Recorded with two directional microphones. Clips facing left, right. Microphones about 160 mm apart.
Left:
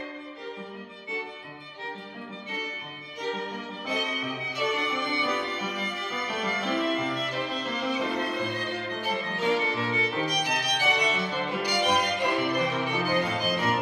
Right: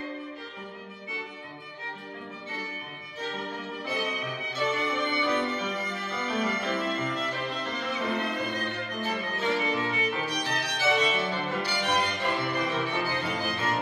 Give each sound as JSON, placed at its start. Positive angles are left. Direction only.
{"t": 4.6, "sound": "music", "side_deg": 10}
{"t": 9.0, "sound": "music", "side_deg": 10}
{"t": 9.6, "sound": "violin", "side_deg": 30}
{"t": 10.2, "sound": "violin", "side_deg": 15}